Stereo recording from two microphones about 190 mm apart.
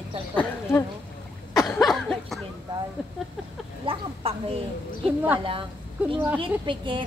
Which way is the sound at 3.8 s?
30° right (ahead or behind).